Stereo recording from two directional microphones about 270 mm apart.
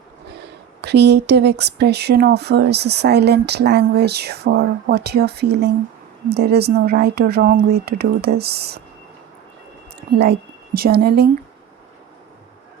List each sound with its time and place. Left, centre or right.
0.8 s speech: right
10.1 s speech: right